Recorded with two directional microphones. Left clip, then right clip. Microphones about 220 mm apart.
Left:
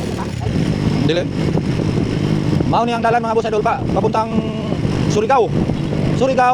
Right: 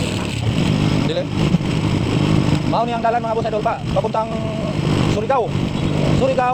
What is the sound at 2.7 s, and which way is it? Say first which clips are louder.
A man's voice: left 3 dB; 50° left (ahead or behind).